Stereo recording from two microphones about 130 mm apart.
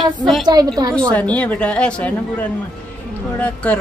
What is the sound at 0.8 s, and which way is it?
Speech, 30° right (ahead or behind).